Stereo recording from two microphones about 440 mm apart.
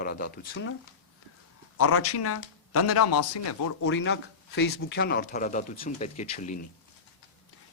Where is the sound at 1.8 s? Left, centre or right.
Left.